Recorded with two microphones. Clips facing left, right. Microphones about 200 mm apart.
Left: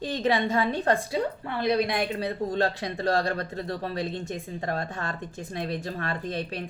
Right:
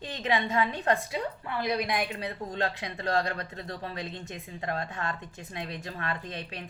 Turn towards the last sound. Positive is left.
turn(degrees=35)  # may be behind; listen again after turning